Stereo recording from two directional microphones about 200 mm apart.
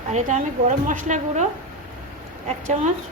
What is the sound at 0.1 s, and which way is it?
A woman's voice, 40° right (ahead or behind).